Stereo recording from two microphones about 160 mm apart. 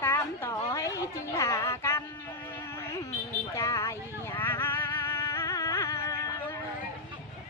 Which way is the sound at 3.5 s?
20° left (ahead or behind).